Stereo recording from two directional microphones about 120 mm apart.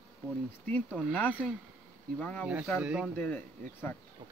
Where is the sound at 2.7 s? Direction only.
5° right (ahead or behind).